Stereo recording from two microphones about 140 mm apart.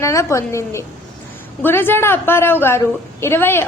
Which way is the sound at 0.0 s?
20° left (ahead or behind).